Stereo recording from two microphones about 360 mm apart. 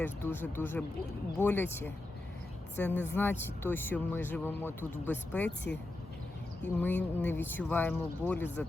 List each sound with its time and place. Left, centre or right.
0.0 s speech: centre
6.7 s speech: centre